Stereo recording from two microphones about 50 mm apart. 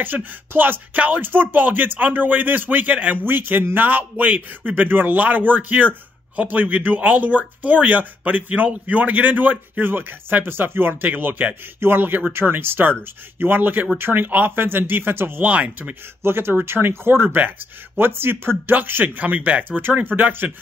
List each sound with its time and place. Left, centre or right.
0.0 s speech: right
3.3 s speech: right
15.4 s speech: right
16.2 s speech: right